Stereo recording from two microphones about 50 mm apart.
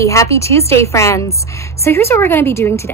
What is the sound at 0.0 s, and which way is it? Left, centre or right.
A woman's voice, left.